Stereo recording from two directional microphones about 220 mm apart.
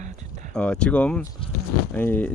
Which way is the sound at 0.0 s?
35° right (ahead or behind).